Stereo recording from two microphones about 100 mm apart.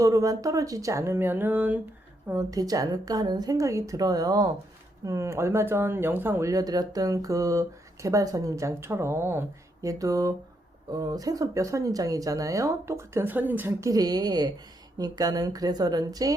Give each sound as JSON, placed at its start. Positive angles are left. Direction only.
{"t": 0.0, "sound": "speech", "side_deg": -35}
{"t": 2.3, "sound": "speech", "side_deg": -35}
{"t": 9.9, "sound": "speech", "side_deg": -35}
{"t": 13.8, "sound": "speech", "side_deg": -40}